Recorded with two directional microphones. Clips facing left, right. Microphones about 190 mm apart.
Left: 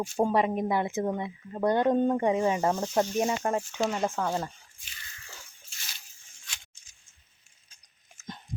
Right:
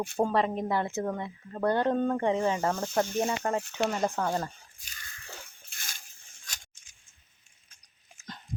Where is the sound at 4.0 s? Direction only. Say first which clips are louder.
Even; 5° left (ahead or behind).